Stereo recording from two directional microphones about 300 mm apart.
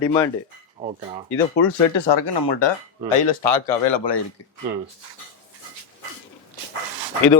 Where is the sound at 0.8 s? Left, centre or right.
Right.